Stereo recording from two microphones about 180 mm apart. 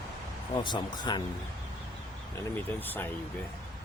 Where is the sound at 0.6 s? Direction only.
25° left (ahead or behind).